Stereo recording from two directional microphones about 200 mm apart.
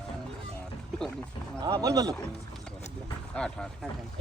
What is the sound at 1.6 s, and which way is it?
Speech, 20° right (ahead or behind).